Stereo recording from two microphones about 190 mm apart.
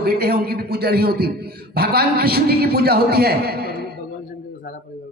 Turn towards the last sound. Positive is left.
turn(degrees=-55)  # may be behind; listen again after turning